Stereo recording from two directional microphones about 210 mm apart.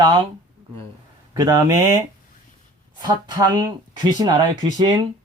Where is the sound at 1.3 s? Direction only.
15° right (ahead or behind).